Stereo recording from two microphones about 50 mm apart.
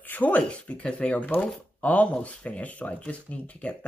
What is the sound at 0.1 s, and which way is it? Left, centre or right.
Speech, left.